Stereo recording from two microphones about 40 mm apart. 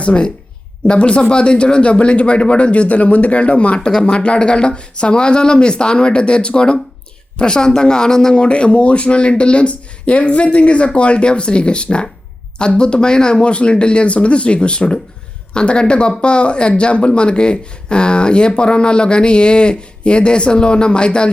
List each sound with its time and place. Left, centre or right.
0.0 s speech: left
3.8 s speech: left
8.4 s speech: left